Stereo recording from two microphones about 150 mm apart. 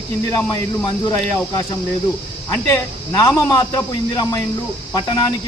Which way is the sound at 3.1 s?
25° left (ahead or behind).